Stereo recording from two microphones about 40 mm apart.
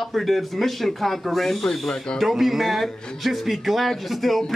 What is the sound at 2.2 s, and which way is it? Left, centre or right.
A man's voice, centre.